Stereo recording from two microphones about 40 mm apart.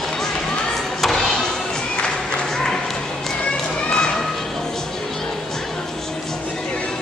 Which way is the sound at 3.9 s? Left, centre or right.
Left.